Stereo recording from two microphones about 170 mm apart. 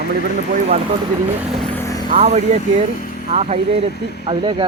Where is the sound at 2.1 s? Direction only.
40° right (ahead or behind).